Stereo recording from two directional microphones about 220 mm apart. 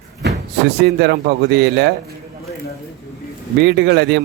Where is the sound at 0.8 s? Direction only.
50° right (ahead or behind).